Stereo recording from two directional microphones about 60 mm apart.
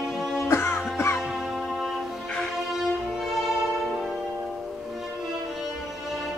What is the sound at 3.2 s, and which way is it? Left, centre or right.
Music, centre.